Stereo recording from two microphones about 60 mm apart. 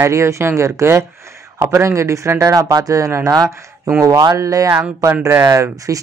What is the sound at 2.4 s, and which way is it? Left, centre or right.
Speech, right.